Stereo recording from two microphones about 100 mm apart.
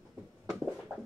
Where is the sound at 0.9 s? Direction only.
5° right (ahead or behind).